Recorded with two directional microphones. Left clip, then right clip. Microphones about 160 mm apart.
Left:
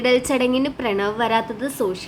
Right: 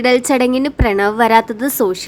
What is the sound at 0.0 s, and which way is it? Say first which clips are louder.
A woman's voice: right 5 dB; 35° right (ahead or behind).